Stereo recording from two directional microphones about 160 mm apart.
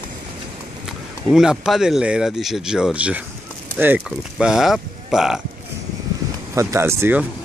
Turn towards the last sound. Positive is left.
turn(degrees=-15)  # may be behind; listen again after turning